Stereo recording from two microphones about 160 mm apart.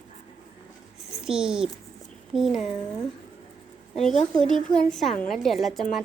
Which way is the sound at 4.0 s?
Centre (ahead or behind).